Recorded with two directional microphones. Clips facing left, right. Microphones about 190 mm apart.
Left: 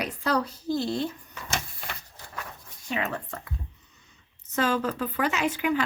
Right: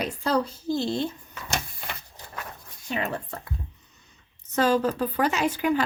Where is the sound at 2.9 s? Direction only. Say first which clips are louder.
Right 1 dB; 35° right (ahead or behind).